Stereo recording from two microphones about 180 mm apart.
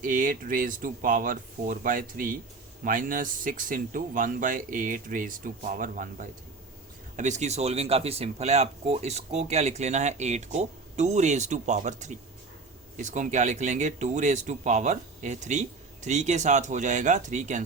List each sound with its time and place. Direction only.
0.0 s speech: 45° right (ahead or behind)